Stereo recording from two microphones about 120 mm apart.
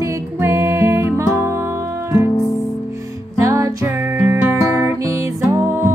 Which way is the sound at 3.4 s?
25° right (ahead or behind).